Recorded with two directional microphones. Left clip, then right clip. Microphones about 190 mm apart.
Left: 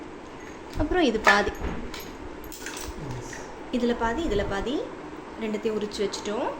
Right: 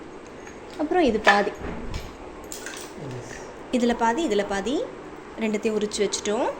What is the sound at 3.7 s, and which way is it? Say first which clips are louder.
Speech: right 4 dB; 35° right (ahead or behind).